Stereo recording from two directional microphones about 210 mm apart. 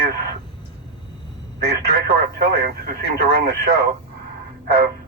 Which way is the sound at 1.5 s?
50° right (ahead or behind).